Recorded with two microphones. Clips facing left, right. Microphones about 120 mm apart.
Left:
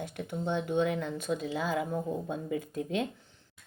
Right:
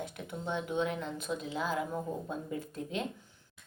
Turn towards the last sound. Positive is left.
turn(degrees=65)  # may be behind; listen again after turning